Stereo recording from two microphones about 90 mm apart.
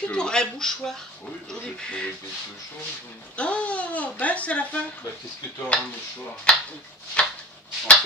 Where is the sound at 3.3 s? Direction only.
15° left (ahead or behind).